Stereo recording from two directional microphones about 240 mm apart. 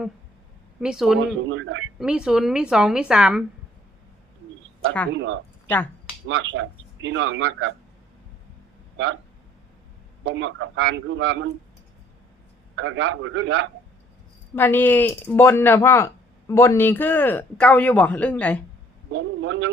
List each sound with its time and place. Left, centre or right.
0.8 s a woman's voice: centre
1.5 s a man's voice: right
2.0 s a woman's voice: centre
5.1 s speech: right
5.6 s speech: centre
6.2 s speech: right
10.2 s speech: right
12.7 s speech: right
14.5 s speech: centre
19.1 s speech: right